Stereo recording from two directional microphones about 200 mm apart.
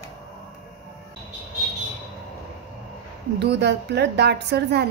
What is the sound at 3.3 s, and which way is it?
A woman's voice, 55° right (ahead or behind).